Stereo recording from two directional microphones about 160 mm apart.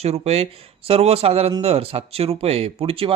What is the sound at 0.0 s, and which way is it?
Speech, 40° right (ahead or behind).